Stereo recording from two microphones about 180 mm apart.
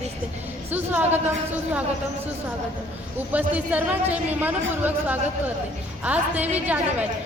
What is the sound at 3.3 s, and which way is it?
A woman's voice, 10° right (ahead or behind).